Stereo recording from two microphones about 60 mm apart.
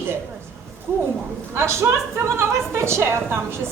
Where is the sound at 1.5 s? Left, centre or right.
Right.